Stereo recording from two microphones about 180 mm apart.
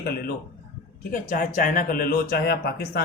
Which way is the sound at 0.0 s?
60° left (ahead or behind).